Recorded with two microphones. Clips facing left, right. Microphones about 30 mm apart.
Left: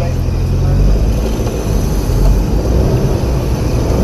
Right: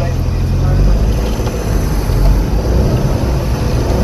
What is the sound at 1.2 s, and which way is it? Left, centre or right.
Vehicle, right.